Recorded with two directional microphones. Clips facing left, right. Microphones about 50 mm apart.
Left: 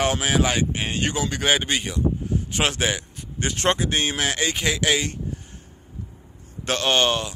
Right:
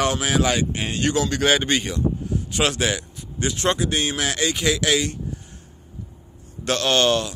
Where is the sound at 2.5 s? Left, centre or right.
Left.